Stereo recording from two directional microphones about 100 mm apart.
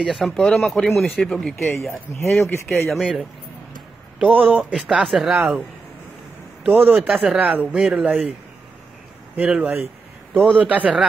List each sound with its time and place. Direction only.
0.0 s speech: centre (ahead or behind)
2.9 s speech: 5° right (ahead or behind)
4.5 s speech: 15° right (ahead or behind)
4.7 s speech: centre (ahead or behind)
6.6 s speech: 15° right (ahead or behind)
9.4 s speech: 15° right (ahead or behind)